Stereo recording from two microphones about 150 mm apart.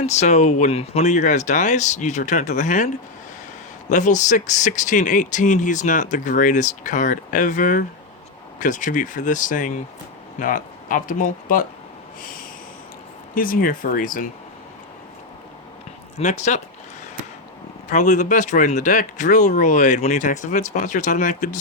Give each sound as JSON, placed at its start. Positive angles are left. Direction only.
{"t": 0.0, "sound": "speech", "side_deg": 50}
{"t": 13.3, "sound": "speech", "side_deg": 70}
{"t": 16.1, "sound": "speech", "side_deg": 50}
{"t": 17.8, "sound": "speech", "side_deg": 55}